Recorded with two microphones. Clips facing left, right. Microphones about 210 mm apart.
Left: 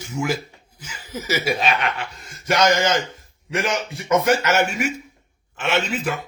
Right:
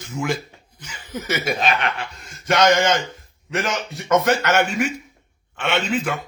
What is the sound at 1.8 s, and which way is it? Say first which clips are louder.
Chuckle: even; 40° right (ahead or behind).